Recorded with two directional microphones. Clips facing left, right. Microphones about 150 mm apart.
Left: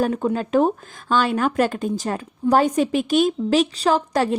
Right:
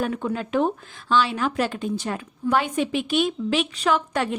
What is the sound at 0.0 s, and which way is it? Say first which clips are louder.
A woman's voice: left 5 dB; 40° left (ahead or behind).